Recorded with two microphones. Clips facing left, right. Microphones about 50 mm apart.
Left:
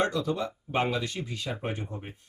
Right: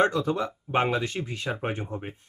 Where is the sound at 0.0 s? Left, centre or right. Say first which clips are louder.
Right 4 dB; right.